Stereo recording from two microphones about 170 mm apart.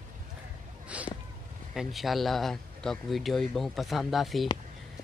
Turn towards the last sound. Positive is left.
turn(degrees=0)  # may be behind; listen again after turning